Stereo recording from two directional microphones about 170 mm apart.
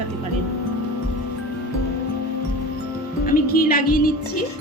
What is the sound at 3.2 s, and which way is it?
A woman's voice, 60° left (ahead or behind).